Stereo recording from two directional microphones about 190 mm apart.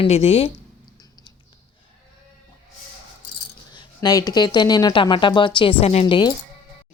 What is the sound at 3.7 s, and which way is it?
Speech, 20° left (ahead or behind).